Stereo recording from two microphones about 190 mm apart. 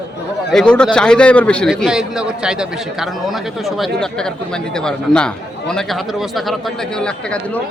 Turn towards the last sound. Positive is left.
turn(degrees=5)  # may be behind; listen again after turning